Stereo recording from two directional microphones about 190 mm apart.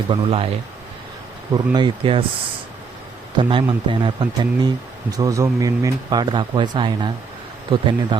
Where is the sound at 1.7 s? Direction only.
25° right (ahead or behind).